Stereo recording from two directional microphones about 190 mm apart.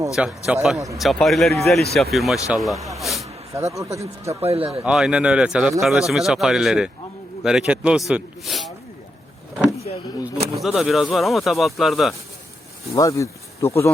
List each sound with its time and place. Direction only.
0.2 s speech: 5° right (ahead or behind)
3.5 s speech: 15° right (ahead or behind)
4.4 s speech: 30° right (ahead or behind)
4.8 s speech: 5° right (ahead or behind)
10.3 s a sound: 35° right (ahead or behind)
10.6 s speech: centre (ahead or behind)
12.9 s speech: 15° left (ahead or behind)